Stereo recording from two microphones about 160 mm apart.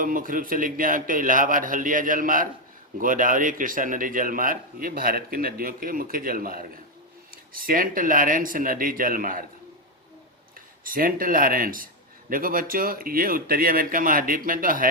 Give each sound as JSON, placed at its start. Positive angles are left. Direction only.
{"t": 0.0, "sound": "a man's voice", "side_deg": -60}
{"t": 10.8, "sound": "a man's voice", "side_deg": -60}